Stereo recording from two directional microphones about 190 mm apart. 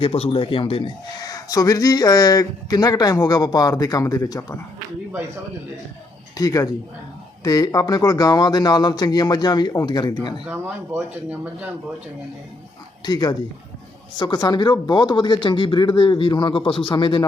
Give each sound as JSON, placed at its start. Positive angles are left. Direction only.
{"t": 0.0, "sound": "a man's voice", "side_deg": 30}
{"t": 6.3, "sound": "a man's voice", "side_deg": 20}
{"t": 10.4, "sound": "speech", "side_deg": -10}
{"t": 13.1, "sound": "a man's voice", "side_deg": 20}